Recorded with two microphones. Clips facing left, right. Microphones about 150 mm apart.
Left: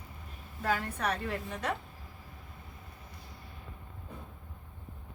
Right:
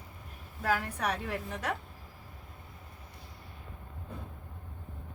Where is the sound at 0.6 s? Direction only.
5° right (ahead or behind).